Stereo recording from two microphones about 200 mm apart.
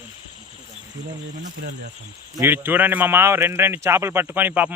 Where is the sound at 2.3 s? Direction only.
10° right (ahead or behind).